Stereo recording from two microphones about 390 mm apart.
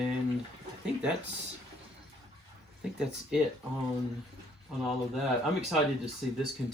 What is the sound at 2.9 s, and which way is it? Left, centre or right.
Speech, centre.